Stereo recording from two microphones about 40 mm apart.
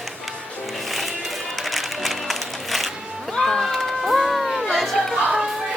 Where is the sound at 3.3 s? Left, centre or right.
Centre.